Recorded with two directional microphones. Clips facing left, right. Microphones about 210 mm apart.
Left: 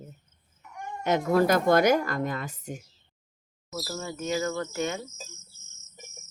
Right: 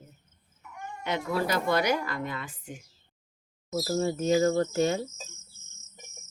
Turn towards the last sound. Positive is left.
turn(degrees=-35)  # may be behind; listen again after turning